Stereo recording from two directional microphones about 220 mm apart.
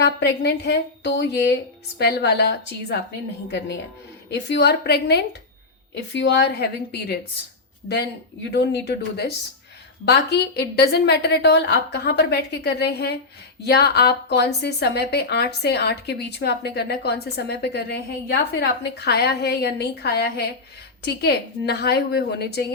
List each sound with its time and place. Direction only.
0.0 s a woman's voice: 50° left (ahead or behind)
4.3 s a woman's voice: 50° left (ahead or behind)
8.4 s a woman's voice: 50° left (ahead or behind)